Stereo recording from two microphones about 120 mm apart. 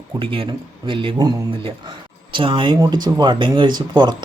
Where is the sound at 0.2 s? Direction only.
45° right (ahead or behind).